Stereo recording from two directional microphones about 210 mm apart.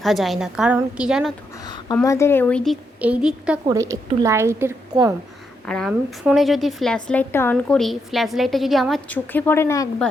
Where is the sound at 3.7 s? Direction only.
15° right (ahead or behind).